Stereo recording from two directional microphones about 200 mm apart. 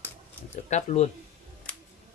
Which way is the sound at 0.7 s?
35° left (ahead or behind).